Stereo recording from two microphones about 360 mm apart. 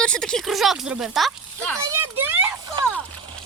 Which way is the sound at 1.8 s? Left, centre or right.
Centre.